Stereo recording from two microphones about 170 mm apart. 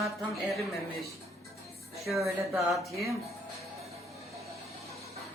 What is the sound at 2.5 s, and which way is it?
Speech, centre (ahead or behind).